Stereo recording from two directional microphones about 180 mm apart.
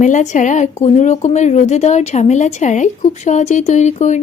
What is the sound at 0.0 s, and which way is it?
Speech, 40° left (ahead or behind).